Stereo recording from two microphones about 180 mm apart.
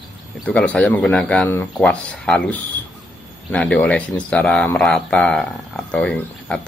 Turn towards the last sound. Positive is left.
turn(degrees=5)  # may be behind; listen again after turning